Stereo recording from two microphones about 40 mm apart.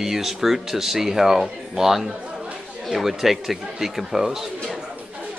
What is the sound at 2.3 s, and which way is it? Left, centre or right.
Chatter, right.